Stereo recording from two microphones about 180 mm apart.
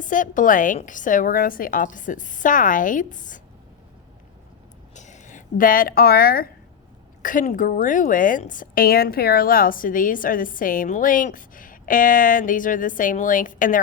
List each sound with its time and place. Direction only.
0.0 s a woman's voice: 45° left (ahead or behind)
4.9 s a woman's voice: 40° left (ahead or behind)